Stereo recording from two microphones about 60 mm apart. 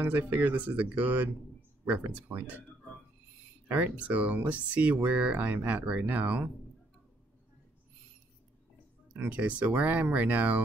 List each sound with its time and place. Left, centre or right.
0.0 s speech: right
3.7 s speech: right
9.1 s speech: right